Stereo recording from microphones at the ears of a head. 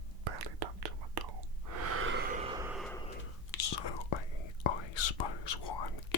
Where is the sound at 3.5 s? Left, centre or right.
Left.